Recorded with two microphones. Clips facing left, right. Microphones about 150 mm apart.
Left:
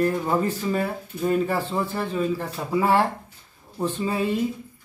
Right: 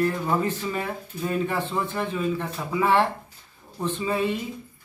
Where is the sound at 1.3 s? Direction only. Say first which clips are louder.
Left 3 dB; 35° left (ahead or behind).